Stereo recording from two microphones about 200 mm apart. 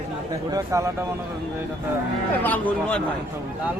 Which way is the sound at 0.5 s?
15° right (ahead or behind).